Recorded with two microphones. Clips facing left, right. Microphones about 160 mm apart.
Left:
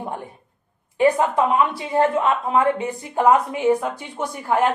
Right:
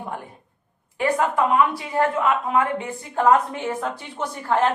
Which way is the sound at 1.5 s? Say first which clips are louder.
Left 1 dB; 25° left (ahead or behind).